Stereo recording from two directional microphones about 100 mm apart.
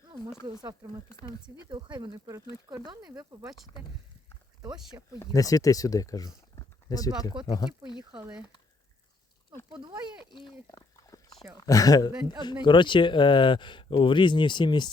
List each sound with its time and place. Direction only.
0.4 s speech: 40° right (ahead or behind)
1.7 s speech: 50° right (ahead or behind)
2.1 s speech: 35° right (ahead or behind)
2.8 s speech: 45° right (ahead or behind)
5.2 s speech: 35° left (ahead or behind)
8.1 s speech: 10° right (ahead or behind)
10.7 s dog: 35° left (ahead or behind)
11.6 s speech: 35° left (ahead or behind)
12.6 s speech: 55° left (ahead or behind)